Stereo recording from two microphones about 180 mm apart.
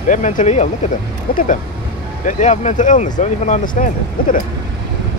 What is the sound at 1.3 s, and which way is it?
Speech, 55° left (ahead or behind).